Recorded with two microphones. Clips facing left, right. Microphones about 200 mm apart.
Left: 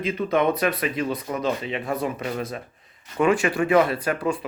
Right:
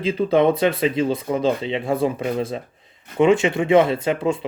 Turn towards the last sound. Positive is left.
turn(degrees=-25)  # may be behind; listen again after turning